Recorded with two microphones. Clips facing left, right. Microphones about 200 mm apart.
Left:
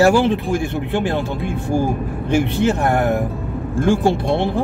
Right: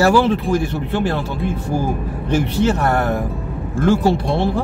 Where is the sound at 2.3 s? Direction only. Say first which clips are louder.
Even; 15° left (ahead or behind).